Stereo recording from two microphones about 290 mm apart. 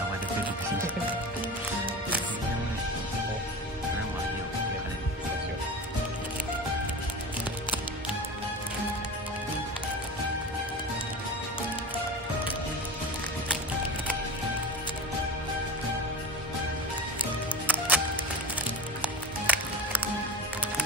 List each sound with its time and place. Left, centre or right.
17.6 s music: centre
19.4 s music: centre